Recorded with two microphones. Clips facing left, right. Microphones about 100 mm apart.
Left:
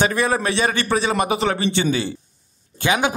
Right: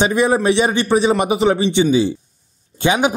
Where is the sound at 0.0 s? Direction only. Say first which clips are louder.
Right 4 dB; 20° right (ahead or behind).